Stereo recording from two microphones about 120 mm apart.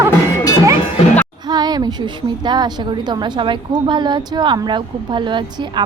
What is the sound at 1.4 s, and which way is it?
A woman's voice, 35° right (ahead or behind).